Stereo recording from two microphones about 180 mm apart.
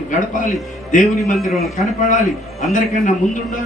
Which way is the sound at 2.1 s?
45° left (ahead or behind).